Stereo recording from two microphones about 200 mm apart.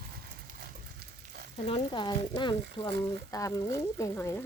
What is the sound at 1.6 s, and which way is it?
Speech, 25° left (ahead or behind).